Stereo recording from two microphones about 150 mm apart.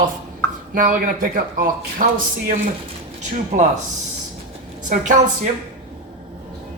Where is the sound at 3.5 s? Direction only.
50° right (ahead or behind).